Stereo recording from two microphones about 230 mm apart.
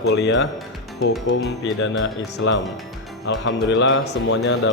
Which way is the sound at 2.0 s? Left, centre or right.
Left.